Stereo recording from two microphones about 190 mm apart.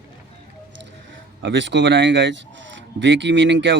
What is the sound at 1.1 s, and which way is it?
Speech, 75° right (ahead or behind).